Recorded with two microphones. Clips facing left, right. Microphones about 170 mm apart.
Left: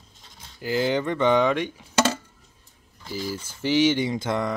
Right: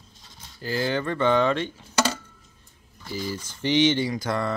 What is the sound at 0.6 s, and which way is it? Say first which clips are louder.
Speech: left 3 dB; 15° left (ahead or behind).